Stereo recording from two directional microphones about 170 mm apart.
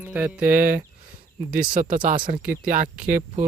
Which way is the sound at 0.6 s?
50° right (ahead or behind).